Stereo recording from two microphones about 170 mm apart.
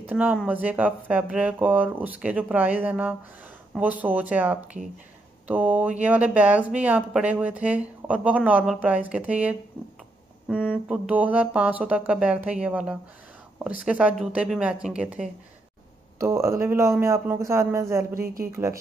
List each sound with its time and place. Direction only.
0.0 s speech: 10° right (ahead or behind)
18.2 s speech: 65° right (ahead or behind)
18.5 s speech: 15° right (ahead or behind)